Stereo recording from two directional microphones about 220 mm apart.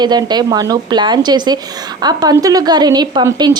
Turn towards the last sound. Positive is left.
turn(degrees=-20)  # may be behind; listen again after turning